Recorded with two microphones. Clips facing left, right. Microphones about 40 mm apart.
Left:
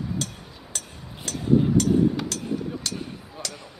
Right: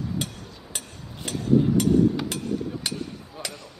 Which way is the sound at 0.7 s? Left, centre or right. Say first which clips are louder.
Even; centre.